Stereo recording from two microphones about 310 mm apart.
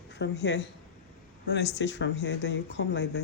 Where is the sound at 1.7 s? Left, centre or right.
Left.